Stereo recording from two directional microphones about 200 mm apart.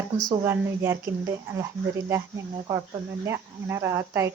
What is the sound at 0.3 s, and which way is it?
Speech, 15° right (ahead or behind).